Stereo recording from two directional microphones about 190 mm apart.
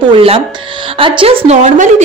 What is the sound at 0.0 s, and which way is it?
A woman's voice, 30° right (ahead or behind).